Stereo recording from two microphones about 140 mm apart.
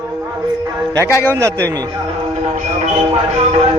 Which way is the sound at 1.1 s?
20° left (ahead or behind).